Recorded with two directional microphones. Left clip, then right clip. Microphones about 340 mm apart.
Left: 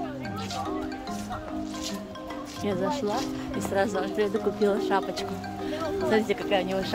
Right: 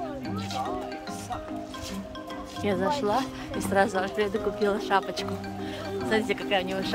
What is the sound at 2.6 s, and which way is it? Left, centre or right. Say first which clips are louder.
Speech: right 2 dB; centre.